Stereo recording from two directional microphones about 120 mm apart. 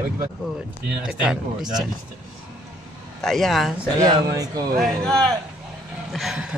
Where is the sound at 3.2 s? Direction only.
Centre (ahead or behind).